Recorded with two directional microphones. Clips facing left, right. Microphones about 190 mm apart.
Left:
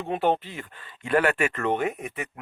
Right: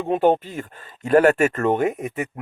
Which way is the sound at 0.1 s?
45° right (ahead or behind).